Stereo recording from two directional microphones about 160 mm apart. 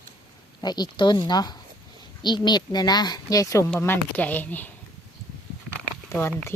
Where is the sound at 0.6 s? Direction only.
25° left (ahead or behind).